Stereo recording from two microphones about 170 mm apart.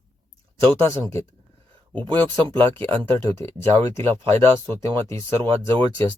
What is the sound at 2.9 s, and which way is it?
Speech, 10° left (ahead or behind).